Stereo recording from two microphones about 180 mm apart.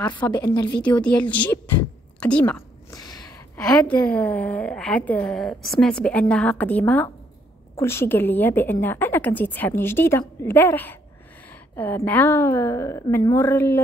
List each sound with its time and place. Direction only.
0.1 s a woman's voice: 25° left (ahead or behind)
1.0 s a woman's voice: 5° left (ahead or behind)
2.9 s a sound: 20° left (ahead or behind)
3.5 s a woman's voice: 5° left (ahead or behind)